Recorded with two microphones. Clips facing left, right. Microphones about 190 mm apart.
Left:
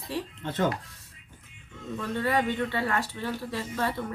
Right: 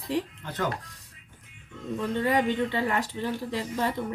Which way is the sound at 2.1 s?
20° right (ahead or behind).